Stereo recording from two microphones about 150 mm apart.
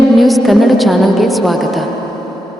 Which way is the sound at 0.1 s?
Centre (ahead or behind).